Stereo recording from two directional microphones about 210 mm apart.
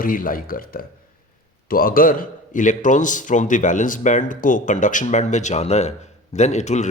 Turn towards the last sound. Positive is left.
turn(degrees=35)  # may be behind; listen again after turning